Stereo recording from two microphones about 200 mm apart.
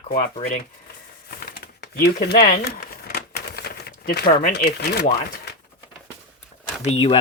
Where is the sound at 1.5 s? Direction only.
50° left (ahead or behind).